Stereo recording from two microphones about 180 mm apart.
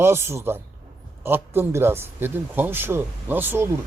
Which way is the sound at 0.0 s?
15° right (ahead or behind).